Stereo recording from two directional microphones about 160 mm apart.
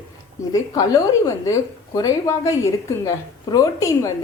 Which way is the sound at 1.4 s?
20° left (ahead or behind).